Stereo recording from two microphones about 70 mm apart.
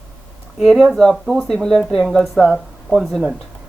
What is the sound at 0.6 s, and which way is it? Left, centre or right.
Speech, centre.